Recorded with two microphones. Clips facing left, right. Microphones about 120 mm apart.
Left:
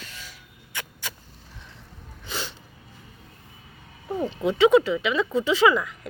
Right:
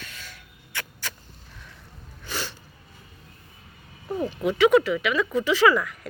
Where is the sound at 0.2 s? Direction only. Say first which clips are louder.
Even; 15° left (ahead or behind).